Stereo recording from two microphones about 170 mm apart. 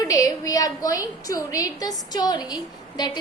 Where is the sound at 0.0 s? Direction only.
20° left (ahead or behind).